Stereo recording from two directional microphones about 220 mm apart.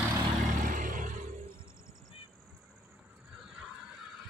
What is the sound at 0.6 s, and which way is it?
Vehicle, 35° right (ahead or behind).